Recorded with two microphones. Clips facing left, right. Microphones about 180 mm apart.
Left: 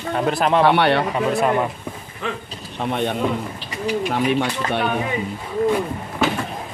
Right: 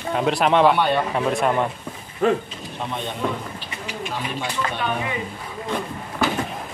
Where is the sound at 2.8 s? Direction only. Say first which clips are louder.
Left 5 dB; 60° left (ahead or behind).